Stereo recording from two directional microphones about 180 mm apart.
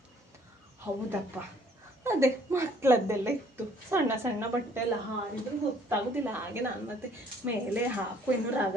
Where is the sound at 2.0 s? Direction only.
15° right (ahead or behind).